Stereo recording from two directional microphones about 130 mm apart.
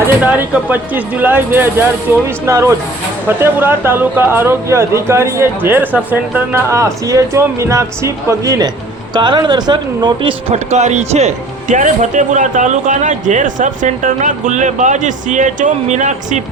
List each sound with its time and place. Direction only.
0.0 s speech: 10° right (ahead or behind); by 10.3 s 40° right (ahead or behind)
10.5 s speech: 60° right (ahead or behind)